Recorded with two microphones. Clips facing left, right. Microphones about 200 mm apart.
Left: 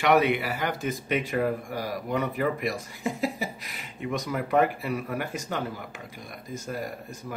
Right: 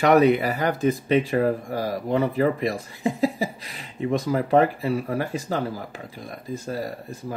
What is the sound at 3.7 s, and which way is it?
Speech, 30° right (ahead or behind).